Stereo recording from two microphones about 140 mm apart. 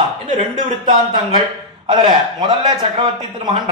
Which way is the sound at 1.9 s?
35° right (ahead or behind).